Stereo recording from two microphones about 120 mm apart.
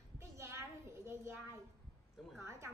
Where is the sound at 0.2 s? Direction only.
25° right (ahead or behind).